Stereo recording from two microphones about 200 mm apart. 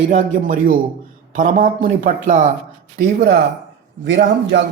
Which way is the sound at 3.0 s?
50° right (ahead or behind).